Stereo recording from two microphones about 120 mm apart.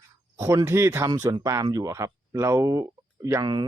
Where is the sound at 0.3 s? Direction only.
25° right (ahead or behind).